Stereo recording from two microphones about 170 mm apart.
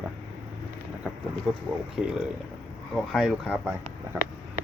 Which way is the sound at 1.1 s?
10° left (ahead or behind).